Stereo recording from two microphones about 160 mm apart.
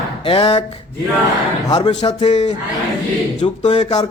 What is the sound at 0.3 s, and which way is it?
Speech, 35° left (ahead or behind).